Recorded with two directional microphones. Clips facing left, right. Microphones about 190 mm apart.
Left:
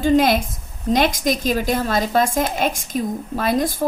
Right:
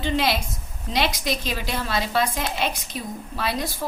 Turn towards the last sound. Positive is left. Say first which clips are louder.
# left 8 dB
turn(degrees=50)  # may be behind; listen again after turning